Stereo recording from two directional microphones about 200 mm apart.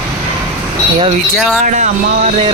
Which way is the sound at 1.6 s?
40° right (ahead or behind).